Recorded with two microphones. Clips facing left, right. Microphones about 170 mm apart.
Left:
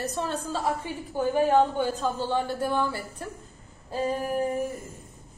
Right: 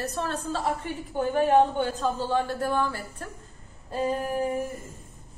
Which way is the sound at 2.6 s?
15° left (ahead or behind).